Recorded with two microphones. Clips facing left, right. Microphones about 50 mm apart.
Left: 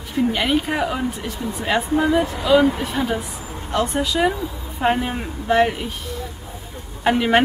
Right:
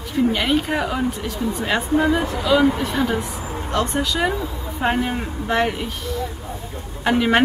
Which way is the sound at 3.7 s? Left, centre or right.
Centre.